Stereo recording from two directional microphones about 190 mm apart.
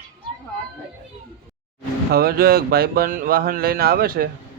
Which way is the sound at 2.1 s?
55° right (ahead or behind).